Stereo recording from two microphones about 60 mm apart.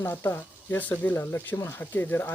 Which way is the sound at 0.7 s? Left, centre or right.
Left.